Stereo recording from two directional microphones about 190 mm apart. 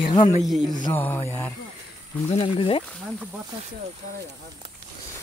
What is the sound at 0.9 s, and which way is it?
Speech, 10° left (ahead or behind).